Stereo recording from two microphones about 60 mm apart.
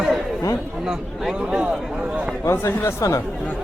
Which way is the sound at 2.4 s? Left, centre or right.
Left.